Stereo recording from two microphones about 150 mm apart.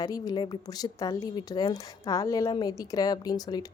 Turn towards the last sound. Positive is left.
turn(degrees=25)  # may be behind; listen again after turning